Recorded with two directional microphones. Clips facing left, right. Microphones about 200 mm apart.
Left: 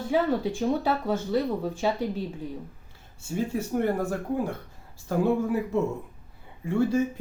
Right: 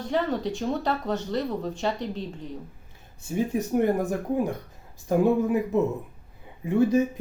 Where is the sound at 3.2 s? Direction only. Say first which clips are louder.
Right 2 dB; 15° right (ahead or behind).